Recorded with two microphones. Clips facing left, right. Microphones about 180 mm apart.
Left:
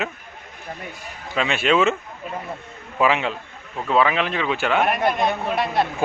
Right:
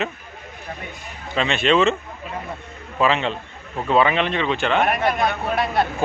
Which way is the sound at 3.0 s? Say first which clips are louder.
Even; 10° left (ahead or behind).